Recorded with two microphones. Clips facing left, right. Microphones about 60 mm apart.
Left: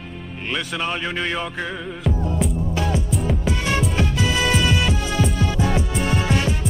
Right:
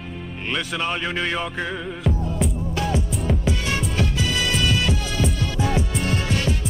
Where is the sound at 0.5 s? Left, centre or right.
Centre.